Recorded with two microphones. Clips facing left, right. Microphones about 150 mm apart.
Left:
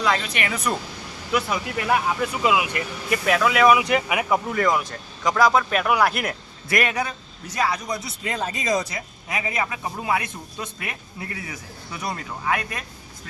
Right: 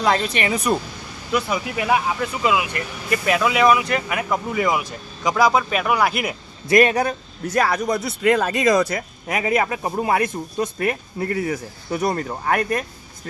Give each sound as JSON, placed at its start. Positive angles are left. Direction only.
{"t": 0.0, "sound": "speech", "side_deg": -35}
{"t": 0.5, "sound": "speech", "side_deg": -15}
{"t": 1.3, "sound": "speech", "side_deg": 0}
{"t": 1.7, "sound": "speech", "side_deg": -10}
{"t": 2.2, "sound": "speech", "side_deg": 10}
{"t": 3.1, "sound": "speech", "side_deg": -5}
{"t": 3.7, "sound": "speech", "side_deg": 15}
{"t": 4.5, "sound": "speech", "side_deg": -5}
{"t": 6.7, "sound": "a man's voice", "side_deg": -25}
{"t": 6.9, "sound": "a man's voice", "side_deg": -45}